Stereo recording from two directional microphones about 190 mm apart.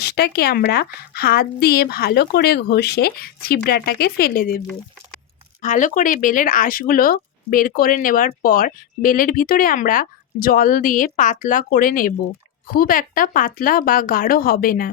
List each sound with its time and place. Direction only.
0.0 s speech: 55° left (ahead or behind)
5.6 s speech: 40° left (ahead or behind)